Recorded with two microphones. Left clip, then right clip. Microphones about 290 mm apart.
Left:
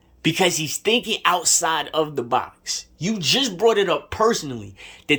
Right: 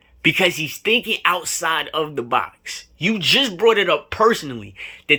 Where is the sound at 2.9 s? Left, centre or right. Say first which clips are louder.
Right 11 dB; centre.